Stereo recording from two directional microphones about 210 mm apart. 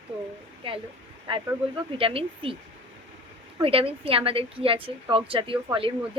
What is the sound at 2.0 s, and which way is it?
Speech, 25° right (ahead or behind).